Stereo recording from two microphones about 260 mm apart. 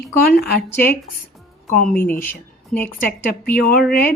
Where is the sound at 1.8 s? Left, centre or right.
Left.